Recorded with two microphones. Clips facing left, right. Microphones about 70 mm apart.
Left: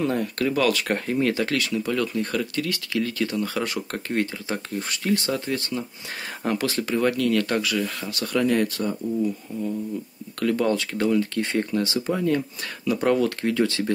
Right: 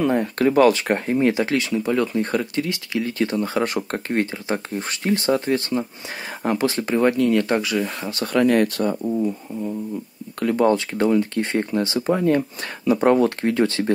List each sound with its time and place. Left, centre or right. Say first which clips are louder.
0.1 s speech: right 6 dB; right
8.3 s speech: right 4 dB; right
10.4 s speech: right 4 dB; right